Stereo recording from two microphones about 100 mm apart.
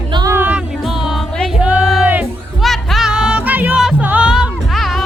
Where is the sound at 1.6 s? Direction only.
10° right (ahead or behind).